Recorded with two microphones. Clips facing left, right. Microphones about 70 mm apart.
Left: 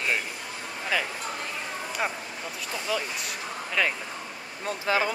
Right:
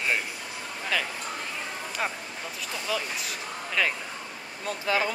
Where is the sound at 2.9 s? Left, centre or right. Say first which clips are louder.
Left 1 dB; centre.